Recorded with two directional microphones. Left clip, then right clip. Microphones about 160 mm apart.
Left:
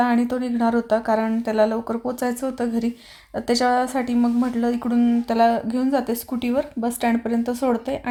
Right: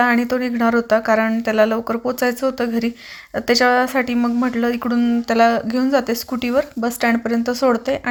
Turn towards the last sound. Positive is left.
turn(degrees=-15)  # may be behind; listen again after turning